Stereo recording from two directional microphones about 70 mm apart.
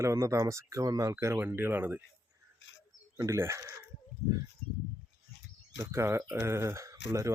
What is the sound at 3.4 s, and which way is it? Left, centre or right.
Speech, right.